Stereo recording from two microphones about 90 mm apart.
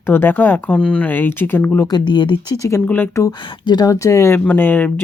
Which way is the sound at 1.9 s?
60° left (ahead or behind).